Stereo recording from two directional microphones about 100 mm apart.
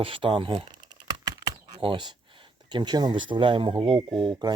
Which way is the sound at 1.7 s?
55° right (ahead or behind).